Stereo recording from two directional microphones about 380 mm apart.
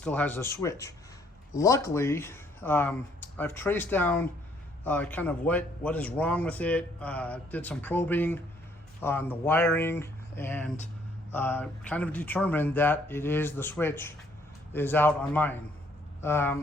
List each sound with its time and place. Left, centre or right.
0.0 s a man's voice: centre